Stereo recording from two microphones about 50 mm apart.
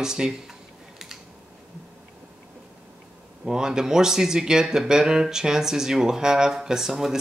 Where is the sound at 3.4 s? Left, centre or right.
Centre.